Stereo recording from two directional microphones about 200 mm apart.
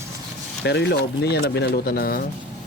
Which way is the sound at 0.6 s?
55° left (ahead or behind).